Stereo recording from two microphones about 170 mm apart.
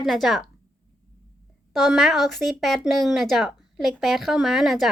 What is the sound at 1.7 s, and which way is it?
A woman's voice, centre (ahead or behind).